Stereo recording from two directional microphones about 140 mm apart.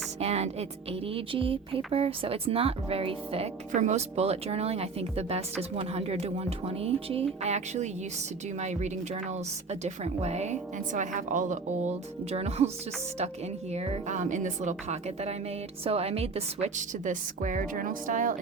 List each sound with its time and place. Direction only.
0.2 s music: 50° right (ahead or behind)
1.0 s a woman's voice: 40° right (ahead or behind)
3.7 s a woman's voice: 55° right (ahead or behind)
13.7 s a woman's voice: 50° right (ahead or behind); by 18.3 s 70° right (ahead or behind)